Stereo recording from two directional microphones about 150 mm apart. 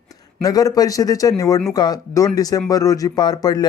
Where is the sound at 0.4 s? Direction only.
25° left (ahead or behind).